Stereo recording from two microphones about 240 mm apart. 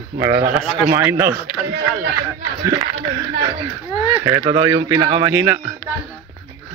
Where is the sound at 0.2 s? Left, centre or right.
Centre.